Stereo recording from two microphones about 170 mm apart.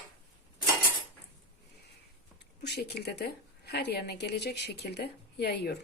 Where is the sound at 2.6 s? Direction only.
75° left (ahead or behind).